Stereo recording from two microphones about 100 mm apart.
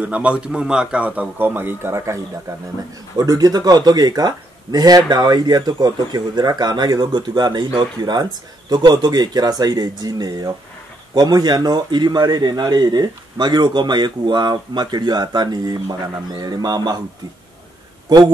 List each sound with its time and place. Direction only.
0.0 s speech: 15° right (ahead or behind); by 2.2 s 30° right (ahead or behind)
3.2 s speech: 40° right (ahead or behind)
18.1 s a man's voice: 40° right (ahead or behind)